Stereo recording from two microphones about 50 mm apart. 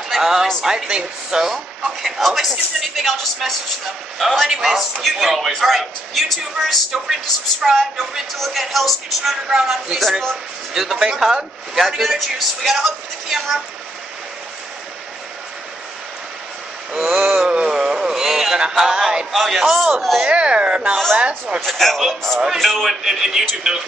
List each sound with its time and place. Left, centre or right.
0.1 s a sound: centre
0.8 s speech: centre
2.0 s a man's voice: centre
4.5 s a man's voice: centre
7.6 s speech: centre
8.4 s a man's voice: centre
10.7 s speech: centre
16.9 s a sound: centre
19.3 s a man's voice: centre
20.2 s speech: right
21.6 s a man's voice: centre